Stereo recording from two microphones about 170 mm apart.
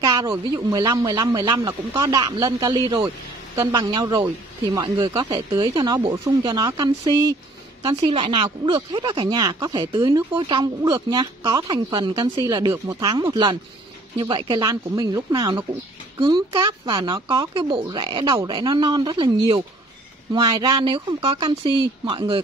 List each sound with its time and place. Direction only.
0.0 s speech: 20° right (ahead or behind)